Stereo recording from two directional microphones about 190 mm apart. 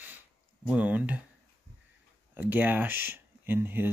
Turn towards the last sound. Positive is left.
turn(degrees=-10)  # may be behind; listen again after turning